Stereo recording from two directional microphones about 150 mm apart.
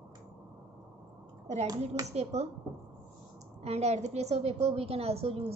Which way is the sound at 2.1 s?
45° right (ahead or behind).